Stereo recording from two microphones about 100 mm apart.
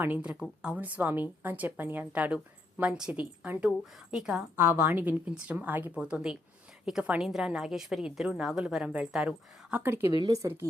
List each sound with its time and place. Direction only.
0.0 s a woman's voice: 15° right (ahead or behind)
4.5 s a woman's voice: 20° right (ahead or behind)
9.8 s a woman's voice: 25° right (ahead or behind)
10.1 s speech: 50° right (ahead or behind)